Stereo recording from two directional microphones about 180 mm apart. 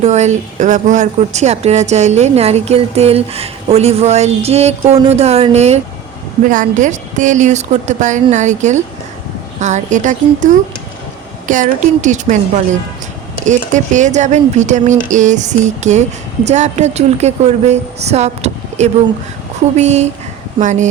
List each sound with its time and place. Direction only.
0.0 s speech: 40° right (ahead or behind)
13.4 s speech: 45° right (ahead or behind)